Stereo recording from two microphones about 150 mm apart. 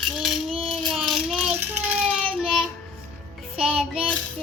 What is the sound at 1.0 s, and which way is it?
Child singing, centre (ahead or behind).